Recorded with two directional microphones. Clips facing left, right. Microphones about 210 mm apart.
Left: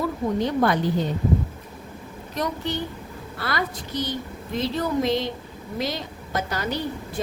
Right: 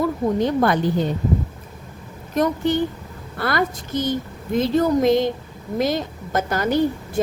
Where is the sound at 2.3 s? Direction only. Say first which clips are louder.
Right 8 dB; 50° right (ahead or behind).